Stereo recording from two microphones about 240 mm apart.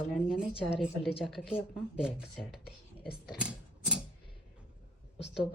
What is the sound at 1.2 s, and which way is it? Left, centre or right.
Speech, centre.